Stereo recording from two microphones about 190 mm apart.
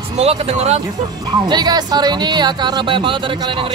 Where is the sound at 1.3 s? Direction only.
20° right (ahead or behind).